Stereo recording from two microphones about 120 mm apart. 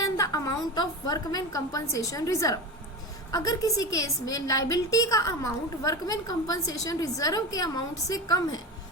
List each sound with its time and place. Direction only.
0.0 s a woman's voice: 30° left (ahead or behind)